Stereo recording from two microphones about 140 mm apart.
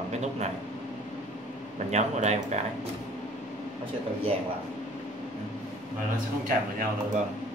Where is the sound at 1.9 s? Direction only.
55° right (ahead or behind).